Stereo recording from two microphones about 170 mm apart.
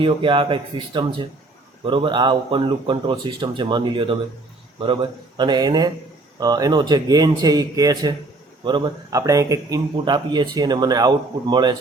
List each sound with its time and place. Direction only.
0.0 s speech: 30° right (ahead or behind)
5.4 s speech: 25° right (ahead or behind)